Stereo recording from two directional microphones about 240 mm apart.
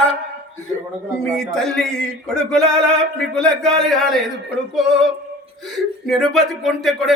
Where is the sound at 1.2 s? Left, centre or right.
Centre.